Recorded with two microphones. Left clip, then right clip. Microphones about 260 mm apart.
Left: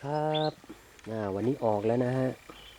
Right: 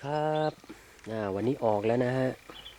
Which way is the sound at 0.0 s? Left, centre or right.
Centre.